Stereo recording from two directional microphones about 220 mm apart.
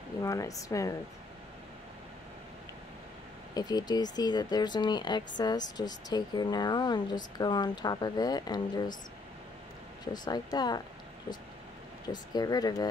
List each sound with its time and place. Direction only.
0.2 s speech: 15° left (ahead or behind)
3.5 s speech: 20° left (ahead or behind)
10.1 s speech: 20° left (ahead or behind)
12.1 s speech: 20° left (ahead or behind)